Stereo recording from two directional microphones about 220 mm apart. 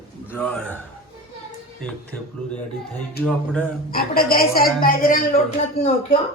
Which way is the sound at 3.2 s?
5° left (ahead or behind).